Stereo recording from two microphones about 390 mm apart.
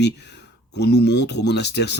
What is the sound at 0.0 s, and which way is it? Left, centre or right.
Speech, left.